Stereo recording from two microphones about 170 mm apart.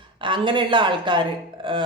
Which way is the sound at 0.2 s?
30° right (ahead or behind).